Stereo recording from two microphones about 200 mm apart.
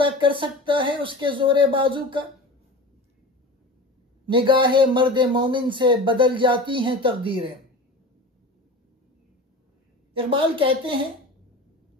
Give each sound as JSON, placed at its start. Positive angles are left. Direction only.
{"t": 0.0, "sound": "speech", "side_deg": -25}
{"t": 4.3, "sound": "speech", "side_deg": -25}
{"t": 10.1, "sound": "speech", "side_deg": -25}